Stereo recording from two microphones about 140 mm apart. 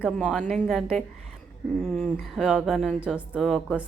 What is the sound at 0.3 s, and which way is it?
A woman's voice, 5° left (ahead or behind).